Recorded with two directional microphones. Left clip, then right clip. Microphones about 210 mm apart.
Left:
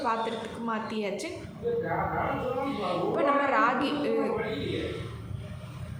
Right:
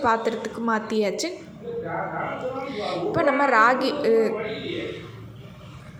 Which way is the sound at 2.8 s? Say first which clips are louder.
Right 6 dB; 30° right (ahead or behind).